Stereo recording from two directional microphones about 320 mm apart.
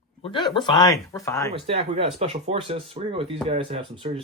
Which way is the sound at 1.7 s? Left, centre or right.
Centre.